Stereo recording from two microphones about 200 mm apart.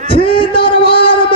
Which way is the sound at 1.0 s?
25° left (ahead or behind).